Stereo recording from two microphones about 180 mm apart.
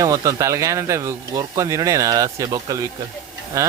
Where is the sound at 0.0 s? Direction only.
20° right (ahead or behind).